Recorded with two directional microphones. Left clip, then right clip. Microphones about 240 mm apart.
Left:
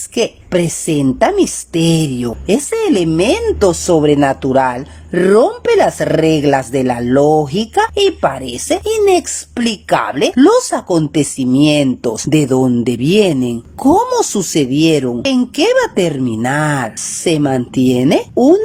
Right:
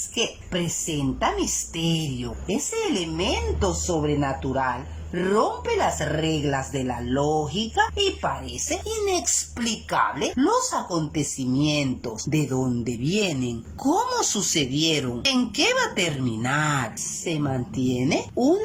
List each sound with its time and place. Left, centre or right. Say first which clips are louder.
0.1 s a woman's voice: left 12 dB; left